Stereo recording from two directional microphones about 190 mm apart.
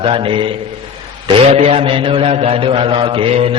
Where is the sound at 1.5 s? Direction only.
35° right (ahead or behind).